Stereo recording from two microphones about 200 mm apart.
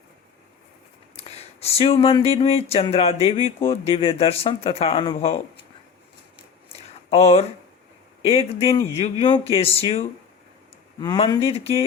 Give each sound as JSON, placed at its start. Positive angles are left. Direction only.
{"t": 1.1, "sound": "speech", "side_deg": 30}
{"t": 7.1, "sound": "speech", "side_deg": 30}